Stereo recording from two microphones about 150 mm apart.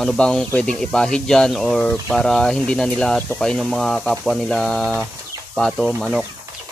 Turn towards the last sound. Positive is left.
turn(degrees=-5)  # may be behind; listen again after turning